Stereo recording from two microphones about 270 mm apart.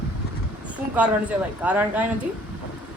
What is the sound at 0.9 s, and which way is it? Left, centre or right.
A man's voice, centre.